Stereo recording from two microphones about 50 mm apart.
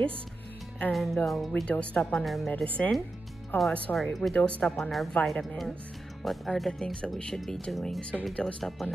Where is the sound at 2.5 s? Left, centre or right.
Left.